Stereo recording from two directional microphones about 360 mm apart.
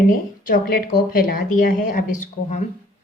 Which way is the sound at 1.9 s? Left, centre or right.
Left.